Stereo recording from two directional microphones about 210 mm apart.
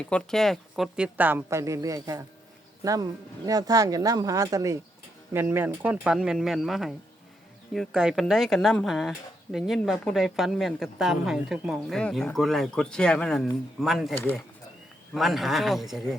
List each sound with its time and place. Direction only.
0.0 s speech: 5° left (ahead or behind)